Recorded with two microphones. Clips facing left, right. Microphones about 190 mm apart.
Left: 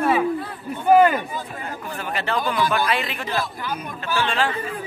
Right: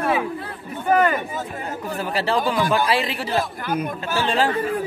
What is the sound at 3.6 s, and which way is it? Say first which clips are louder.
Speech: right 5 dB; 55° right (ahead or behind).